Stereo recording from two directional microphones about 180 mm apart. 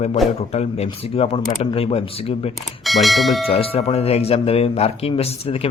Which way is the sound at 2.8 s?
Centre (ahead or behind).